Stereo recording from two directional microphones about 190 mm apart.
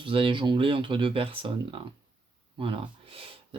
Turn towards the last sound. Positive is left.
turn(degrees=-30)  # may be behind; listen again after turning